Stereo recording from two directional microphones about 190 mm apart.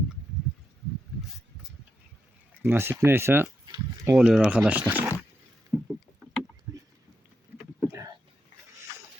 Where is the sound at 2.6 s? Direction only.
10° right (ahead or behind).